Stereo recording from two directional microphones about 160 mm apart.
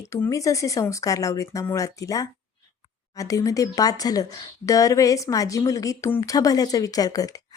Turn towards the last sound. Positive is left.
turn(degrees=20)  # may be behind; listen again after turning